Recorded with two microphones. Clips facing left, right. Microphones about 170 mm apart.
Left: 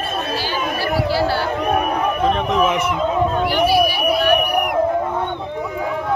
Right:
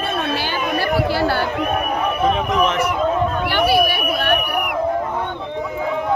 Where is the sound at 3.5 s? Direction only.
55° right (ahead or behind).